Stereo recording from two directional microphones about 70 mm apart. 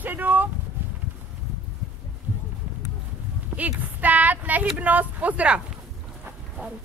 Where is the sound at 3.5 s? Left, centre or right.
Right.